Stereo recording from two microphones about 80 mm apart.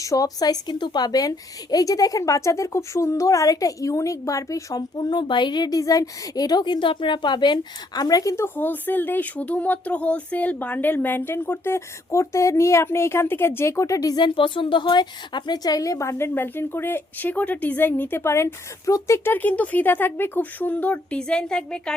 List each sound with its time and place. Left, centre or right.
0.0 s a woman's voice: left
8.4 s speech: left
14.2 s a woman's voice: left
19.3 s speech: left